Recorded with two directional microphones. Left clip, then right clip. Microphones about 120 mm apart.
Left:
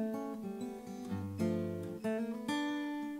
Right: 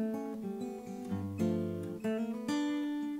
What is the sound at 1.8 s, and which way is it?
Music, 15° right (ahead or behind).